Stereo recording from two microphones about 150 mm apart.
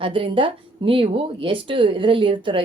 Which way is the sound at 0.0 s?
35° right (ahead or behind).